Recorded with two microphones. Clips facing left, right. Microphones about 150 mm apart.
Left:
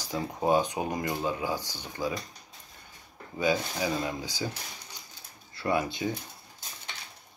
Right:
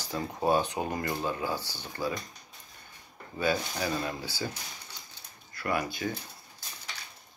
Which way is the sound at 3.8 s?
15° left (ahead or behind).